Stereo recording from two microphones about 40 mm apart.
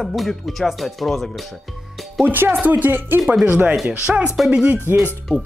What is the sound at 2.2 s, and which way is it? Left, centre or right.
Speech, right.